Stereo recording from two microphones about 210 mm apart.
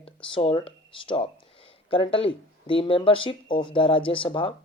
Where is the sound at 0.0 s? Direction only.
25° left (ahead or behind).